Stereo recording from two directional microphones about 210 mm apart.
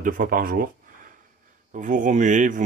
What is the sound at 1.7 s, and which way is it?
Speech, 35° right (ahead or behind).